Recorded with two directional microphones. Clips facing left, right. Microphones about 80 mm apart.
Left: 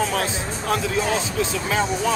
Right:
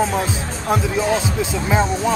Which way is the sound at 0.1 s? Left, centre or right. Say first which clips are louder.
Right 2 dB; right.